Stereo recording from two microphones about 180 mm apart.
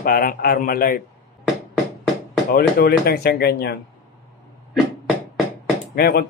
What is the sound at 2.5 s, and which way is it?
Speech, 55° left (ahead or behind).